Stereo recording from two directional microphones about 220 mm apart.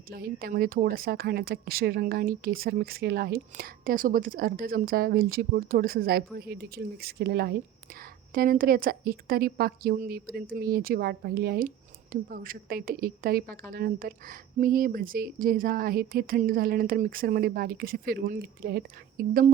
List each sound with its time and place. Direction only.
0.1 s a woman's voice: 40° right (ahead or behind)